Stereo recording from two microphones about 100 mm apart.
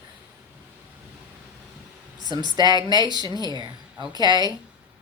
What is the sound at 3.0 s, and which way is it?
Speech, 45° left (ahead or behind).